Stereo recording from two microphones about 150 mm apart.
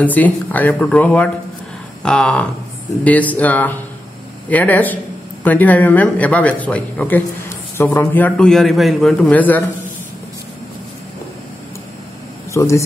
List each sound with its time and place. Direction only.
0.0 s a man's voice: 10° left (ahead or behind)
12.5 s speech: 20° left (ahead or behind)